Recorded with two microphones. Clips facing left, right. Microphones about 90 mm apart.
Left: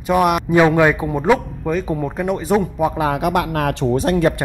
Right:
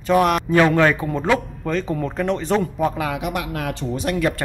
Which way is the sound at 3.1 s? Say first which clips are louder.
Left 7 dB; 55° left (ahead or behind).